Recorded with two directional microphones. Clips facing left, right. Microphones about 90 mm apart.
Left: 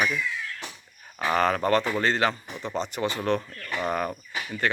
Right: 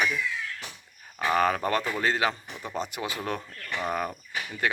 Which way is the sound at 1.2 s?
5° right (ahead or behind).